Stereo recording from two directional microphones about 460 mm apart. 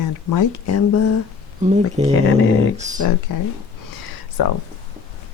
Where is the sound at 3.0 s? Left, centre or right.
Left.